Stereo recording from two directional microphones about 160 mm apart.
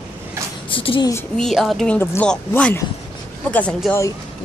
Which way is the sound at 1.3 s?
Centre (ahead or behind).